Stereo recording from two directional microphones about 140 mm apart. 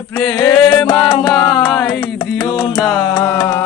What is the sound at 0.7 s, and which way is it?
Music, 25° left (ahead or behind).